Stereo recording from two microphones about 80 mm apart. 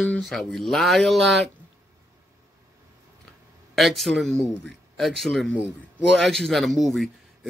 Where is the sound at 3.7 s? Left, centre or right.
Centre.